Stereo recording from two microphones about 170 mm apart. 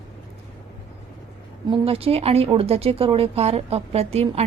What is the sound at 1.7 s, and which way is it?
Speech, 35° right (ahead or behind).